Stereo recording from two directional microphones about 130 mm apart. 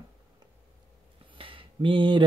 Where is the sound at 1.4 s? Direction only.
45° right (ahead or behind).